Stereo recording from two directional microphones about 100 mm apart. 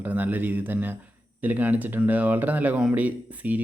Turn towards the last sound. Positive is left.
turn(degrees=-15)  # may be behind; listen again after turning